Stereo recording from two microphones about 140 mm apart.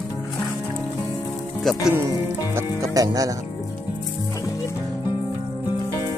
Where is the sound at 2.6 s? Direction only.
25° right (ahead or behind).